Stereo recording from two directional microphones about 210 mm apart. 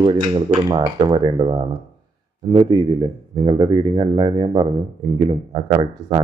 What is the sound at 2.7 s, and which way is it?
Speech, 20° right (ahead or behind).